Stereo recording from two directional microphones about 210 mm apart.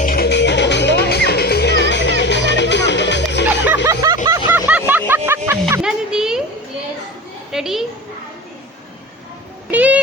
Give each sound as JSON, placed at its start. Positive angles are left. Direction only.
{"t": 0.0, "sound": "music", "side_deg": 45}
{"t": 3.8, "sound": "vehicle", "side_deg": -15}
{"t": 5.7, "sound": "music", "side_deg": -5}
{"t": 7.5, "sound": "children playing", "side_deg": 0}
{"t": 9.7, "sound": "child singing", "side_deg": -5}